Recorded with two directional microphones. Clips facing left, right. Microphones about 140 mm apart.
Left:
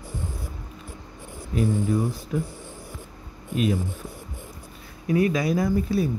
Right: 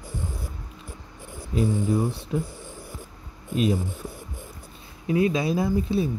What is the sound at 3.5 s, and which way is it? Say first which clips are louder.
Speech: right 1 dB; 30° right (ahead or behind).